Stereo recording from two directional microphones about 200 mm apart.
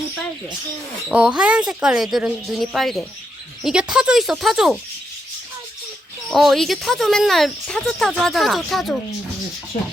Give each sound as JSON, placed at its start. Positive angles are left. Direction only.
{"t": 1.0, "sound": "speech", "side_deg": -5}
{"t": 6.3, "sound": "speech", "side_deg": 0}